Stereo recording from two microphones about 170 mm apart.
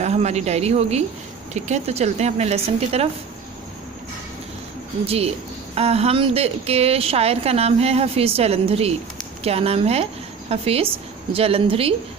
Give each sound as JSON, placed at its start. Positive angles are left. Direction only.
{"t": 0.0, "sound": "a woman's voice", "side_deg": -40}
{"t": 5.0, "sound": "a woman's voice", "side_deg": -35}